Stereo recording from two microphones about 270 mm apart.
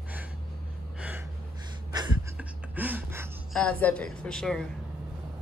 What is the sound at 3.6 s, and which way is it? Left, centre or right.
Speech, centre.